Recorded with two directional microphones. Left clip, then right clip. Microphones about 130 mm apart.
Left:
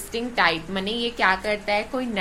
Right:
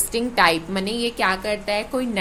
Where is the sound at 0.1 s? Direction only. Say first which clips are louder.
Right 3 dB; 45° right (ahead or behind).